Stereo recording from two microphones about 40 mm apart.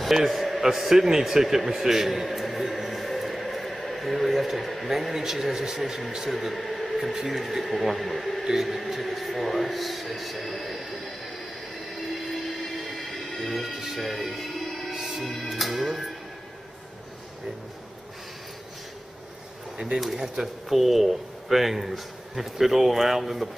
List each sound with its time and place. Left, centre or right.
0.0 s a man's voice: centre
2.2 s a sound: centre
6.0 s a man's voice: centre
6.3 s speech: centre
12.8 s music: centre
15.5 s speech: centre
20.6 s speech: centre